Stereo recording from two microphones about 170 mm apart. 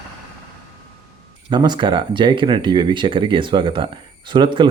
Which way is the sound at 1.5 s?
25° right (ahead or behind).